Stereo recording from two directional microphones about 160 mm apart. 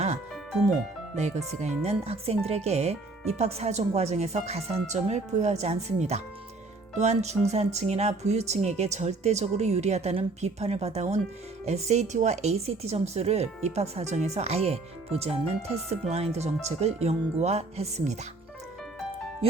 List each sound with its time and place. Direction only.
0.7 s speech: 45° right (ahead or behind)